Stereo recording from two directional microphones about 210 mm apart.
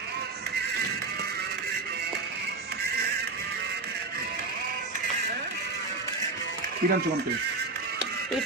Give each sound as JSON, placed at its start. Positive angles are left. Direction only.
{"t": 6.8, "sound": "speech", "side_deg": -50}